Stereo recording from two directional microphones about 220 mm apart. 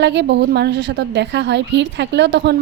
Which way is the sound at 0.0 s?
50° right (ahead or behind).